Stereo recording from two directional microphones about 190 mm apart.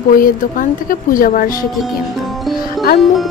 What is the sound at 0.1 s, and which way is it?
A woman's voice, 45° left (ahead or behind).